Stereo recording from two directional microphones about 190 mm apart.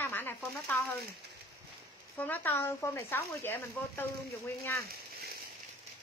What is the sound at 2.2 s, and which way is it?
Speech, 10° left (ahead or behind).